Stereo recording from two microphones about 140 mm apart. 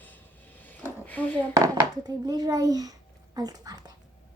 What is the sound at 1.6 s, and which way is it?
A child's voice, 25° right (ahead or behind).